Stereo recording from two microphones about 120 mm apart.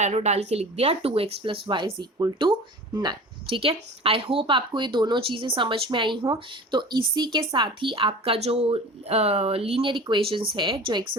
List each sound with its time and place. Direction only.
0.0 s speech: 70° right (ahead or behind); by 3.6 s 35° right (ahead or behind)
3.6 s speech: 50° right (ahead or behind)